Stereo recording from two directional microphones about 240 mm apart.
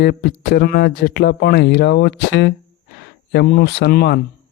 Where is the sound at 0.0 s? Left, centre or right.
Left.